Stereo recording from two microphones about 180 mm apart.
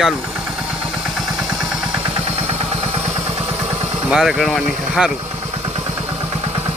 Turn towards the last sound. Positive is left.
turn(degrees=0)  # may be behind; listen again after turning